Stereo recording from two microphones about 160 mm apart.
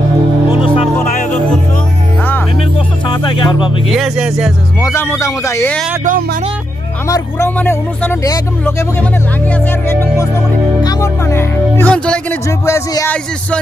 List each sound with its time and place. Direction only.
3.1 s music: 30° left (ahead or behind)
3.9 s speech: 5° right (ahead or behind)
4.8 s speech: 15° left (ahead or behind)
7.1 s speech: 20° left (ahead or behind)
9.8 s speech: 15° left (ahead or behind)
12.4 s speech: 20° left (ahead or behind)